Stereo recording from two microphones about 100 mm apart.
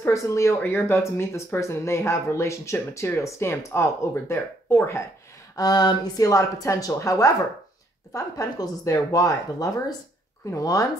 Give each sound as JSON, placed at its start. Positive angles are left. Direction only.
{"t": 0.0, "sound": "speech", "side_deg": 30}
{"t": 5.6, "sound": "speech", "side_deg": 45}